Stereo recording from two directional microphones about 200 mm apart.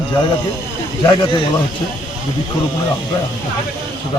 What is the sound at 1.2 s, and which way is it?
Speech, 25° left (ahead or behind).